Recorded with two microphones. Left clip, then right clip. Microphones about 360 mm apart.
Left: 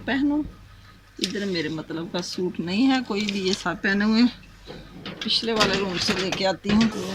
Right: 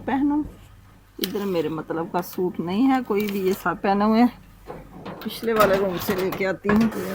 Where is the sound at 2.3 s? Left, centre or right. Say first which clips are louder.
Right 2 dB; centre.